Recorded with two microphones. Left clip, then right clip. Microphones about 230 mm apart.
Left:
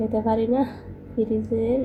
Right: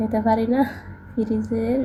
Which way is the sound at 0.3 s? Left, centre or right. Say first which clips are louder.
Right 1 dB; right.